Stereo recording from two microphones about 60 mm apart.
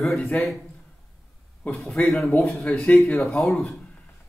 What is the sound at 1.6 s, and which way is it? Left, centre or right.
A man's voice, left.